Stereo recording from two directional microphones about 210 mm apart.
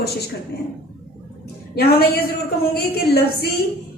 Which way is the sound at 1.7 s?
50° left (ahead or behind).